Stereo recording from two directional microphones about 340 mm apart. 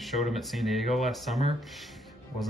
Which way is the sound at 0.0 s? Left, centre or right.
Centre.